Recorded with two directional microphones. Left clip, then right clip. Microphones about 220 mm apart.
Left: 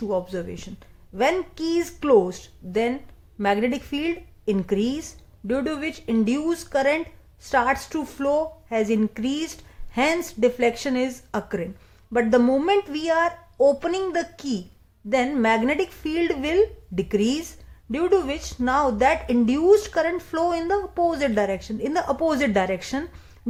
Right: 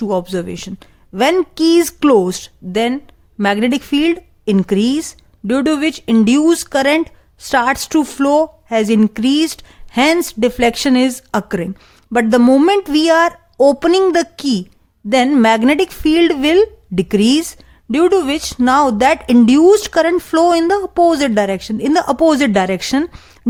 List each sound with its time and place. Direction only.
0.0 s a woman's voice: 40° right (ahead or behind)